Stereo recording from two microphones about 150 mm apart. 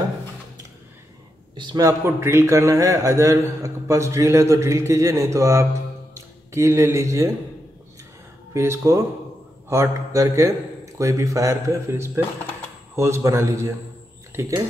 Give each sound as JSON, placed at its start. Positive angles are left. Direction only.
{"t": 1.6, "sound": "a man's voice", "side_deg": -25}
{"t": 8.5, "sound": "a man's voice", "side_deg": -20}